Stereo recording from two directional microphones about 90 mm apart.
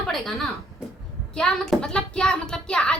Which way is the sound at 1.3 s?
5° left (ahead or behind).